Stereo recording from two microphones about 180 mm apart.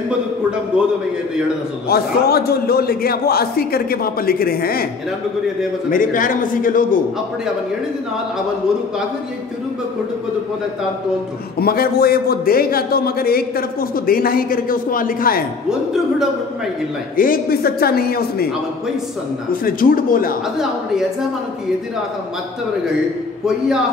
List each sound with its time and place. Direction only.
1.9 s a man's voice: 60° left (ahead or behind)
5.9 s a man's voice: 50° left (ahead or behind)
11.5 s a man's voice: 55° left (ahead or behind)
15.7 s speech: 5° right (ahead or behind)
17.2 s a man's voice: 55° left (ahead or behind)
19.5 s a man's voice: 50° left (ahead or behind)